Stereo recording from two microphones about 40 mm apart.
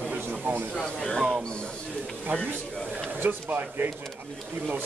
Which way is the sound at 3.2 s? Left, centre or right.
Right.